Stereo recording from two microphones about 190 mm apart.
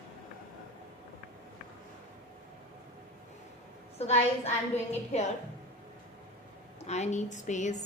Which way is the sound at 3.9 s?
35° left (ahead or behind).